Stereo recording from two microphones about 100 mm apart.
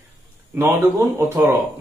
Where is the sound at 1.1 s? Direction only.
25° right (ahead or behind).